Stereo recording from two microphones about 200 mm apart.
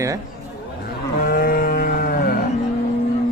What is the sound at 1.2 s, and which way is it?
Cattle, 45° left (ahead or behind).